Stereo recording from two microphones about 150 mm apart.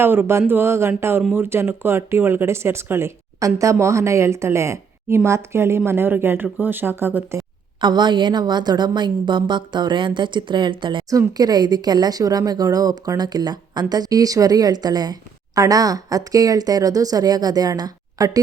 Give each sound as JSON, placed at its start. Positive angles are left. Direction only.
{"t": 0.0, "sound": "speech", "side_deg": -15}
{"t": 7.8, "sound": "a woman's voice", "side_deg": -30}